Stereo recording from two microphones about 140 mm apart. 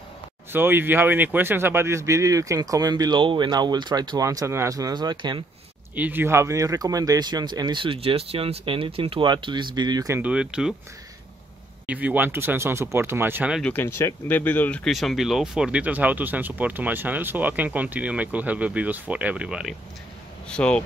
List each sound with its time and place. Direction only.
0.5 s speech: 15° right (ahead or behind); by 5.4 s 30° right (ahead or behind)
5.9 s speech: 15° right (ahead or behind); by 10.1 s 30° right (ahead or behind)
10.1 s speech: 10° right (ahead or behind)
11.8 s speech: 10° right (ahead or behind)
13.6 s speech: 10° left (ahead or behind)
14.9 s speech: centre (ahead or behind)
20.4 s speech: 5° left (ahead or behind)